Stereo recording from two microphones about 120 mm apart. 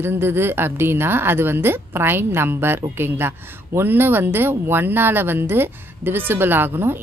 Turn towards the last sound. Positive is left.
turn(degrees=-20)  # may be behind; listen again after turning